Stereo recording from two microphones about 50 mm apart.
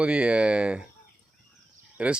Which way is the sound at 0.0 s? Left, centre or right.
Centre.